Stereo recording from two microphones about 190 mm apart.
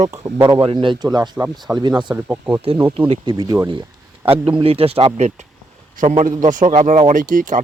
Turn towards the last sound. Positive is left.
turn(degrees=-45)  # may be behind; listen again after turning